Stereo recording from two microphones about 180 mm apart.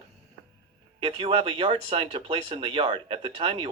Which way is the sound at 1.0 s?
30° right (ahead or behind).